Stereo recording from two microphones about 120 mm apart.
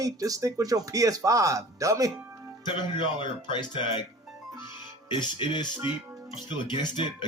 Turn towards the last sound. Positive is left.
turn(degrees=40)  # may be behind; listen again after turning